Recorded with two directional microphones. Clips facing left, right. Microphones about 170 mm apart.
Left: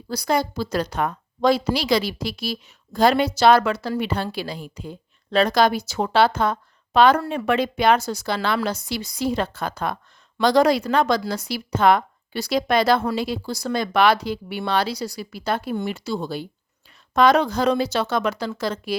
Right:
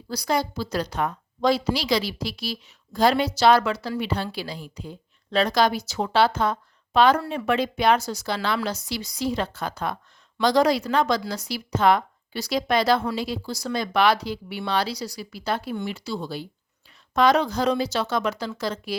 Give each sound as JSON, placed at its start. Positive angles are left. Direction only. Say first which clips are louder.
{"t": 0.1, "sound": "speech", "louder": "left 3 dB", "side_deg": 50}